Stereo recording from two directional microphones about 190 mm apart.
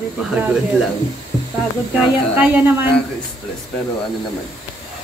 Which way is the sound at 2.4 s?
10° right (ahead or behind).